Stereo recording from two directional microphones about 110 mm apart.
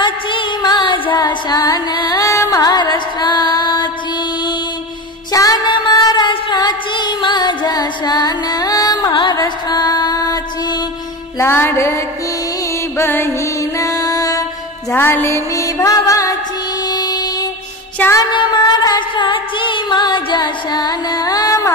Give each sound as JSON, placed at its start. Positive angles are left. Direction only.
{"t": 0.0, "sound": "music", "side_deg": 45}
{"t": 5.3, "sound": "music", "side_deg": 35}
{"t": 11.3, "sound": "music", "side_deg": 20}
{"t": 14.9, "sound": "music", "side_deg": 20}
{"t": 16.9, "sound": "a sound", "side_deg": 35}
{"t": 18.0, "sound": "music", "side_deg": 15}
{"t": 18.3, "sound": "music", "side_deg": 40}